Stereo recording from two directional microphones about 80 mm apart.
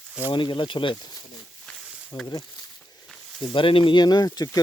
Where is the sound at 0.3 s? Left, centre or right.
Left.